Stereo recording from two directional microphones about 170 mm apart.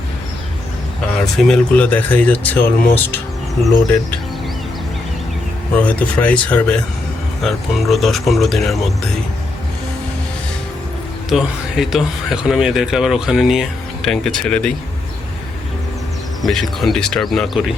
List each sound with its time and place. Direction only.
1.5 s speech: 10° left (ahead or behind)
5.7 s speech: 10° left (ahead or behind)
11.3 s speech: centre (ahead or behind)
16.4 s speech: centre (ahead or behind)